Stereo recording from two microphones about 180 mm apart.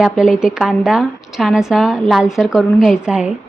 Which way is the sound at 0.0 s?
5° right (ahead or behind).